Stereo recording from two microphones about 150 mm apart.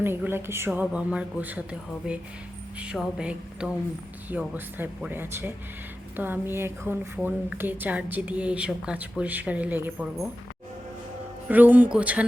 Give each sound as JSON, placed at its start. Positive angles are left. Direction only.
{"t": 0.0, "sound": "a woman's voice", "side_deg": -15}
{"t": 11.4, "sound": "a woman's voice", "side_deg": -10}